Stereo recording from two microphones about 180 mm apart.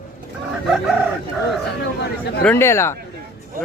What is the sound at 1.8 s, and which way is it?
Speech, 70° left (ahead or behind).